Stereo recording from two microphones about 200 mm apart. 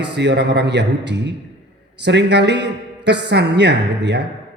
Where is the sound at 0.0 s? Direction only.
60° right (ahead or behind).